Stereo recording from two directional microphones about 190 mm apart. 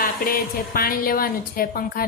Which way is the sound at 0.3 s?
50° left (ahead or behind).